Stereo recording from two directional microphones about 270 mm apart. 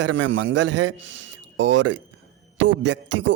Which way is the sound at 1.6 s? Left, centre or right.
Right.